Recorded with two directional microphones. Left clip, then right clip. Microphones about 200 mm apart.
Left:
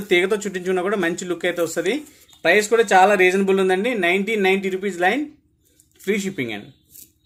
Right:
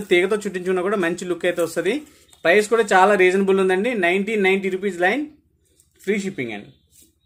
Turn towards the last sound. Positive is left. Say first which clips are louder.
# left 1 dB
turn(degrees=10)  # may be behind; listen again after turning